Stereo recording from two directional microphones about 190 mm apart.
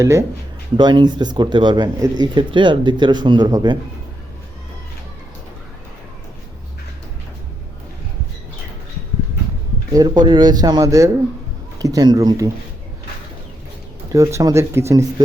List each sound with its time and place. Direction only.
0.0 s speech: 15° right (ahead or behind)
9.9 s speech: 20° right (ahead or behind)
14.1 s speech: 15° right (ahead or behind)